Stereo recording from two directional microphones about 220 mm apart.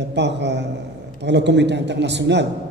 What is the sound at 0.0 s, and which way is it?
A man's voice, 50° right (ahead or behind).